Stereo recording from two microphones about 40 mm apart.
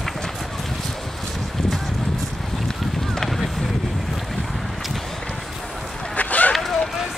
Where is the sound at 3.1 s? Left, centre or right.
Centre.